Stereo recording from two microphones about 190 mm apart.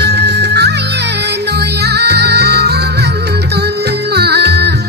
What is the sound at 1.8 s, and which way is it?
Music, 60° right (ahead or behind).